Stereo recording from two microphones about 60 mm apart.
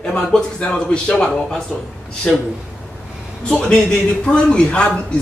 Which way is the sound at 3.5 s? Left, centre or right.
Centre.